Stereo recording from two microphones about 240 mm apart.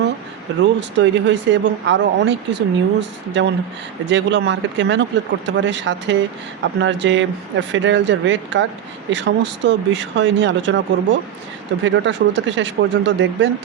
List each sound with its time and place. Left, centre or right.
0.8 s speech: right